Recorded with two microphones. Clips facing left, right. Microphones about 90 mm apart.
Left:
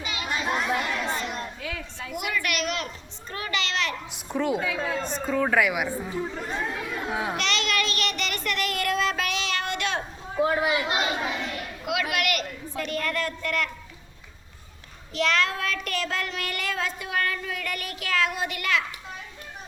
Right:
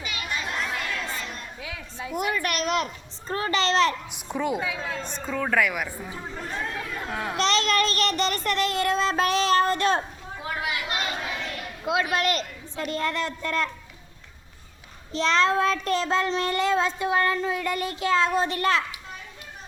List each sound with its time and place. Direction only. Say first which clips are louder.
0.0 s children playing: left 2 dB; 25° left (ahead or behind)
1.0 s chatter: left 4 dB; 30° left (ahead or behind)
1.6 s a sound: left 1 dB; 10° right (ahead or behind)
2.1 s children playing: right 2 dB; 40° right (ahead or behind)
4.1 s a woman's voice: left 1 dB; centre (ahead or behind)
7.3 s a child's voice: right 4 dB; 35° right (ahead or behind)
10.8 s speech: left 3 dB; 20° left (ahead or behind)
11.9 s speech: right 3 dB; 30° right (ahead or behind)
15.1 s speech: right 3 dB; 30° right (ahead or behind)